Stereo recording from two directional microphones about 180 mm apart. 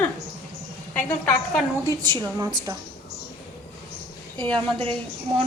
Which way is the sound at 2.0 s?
25° right (ahead or behind).